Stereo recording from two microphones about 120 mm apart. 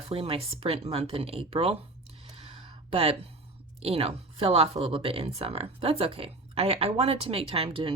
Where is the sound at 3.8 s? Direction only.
55° right (ahead or behind).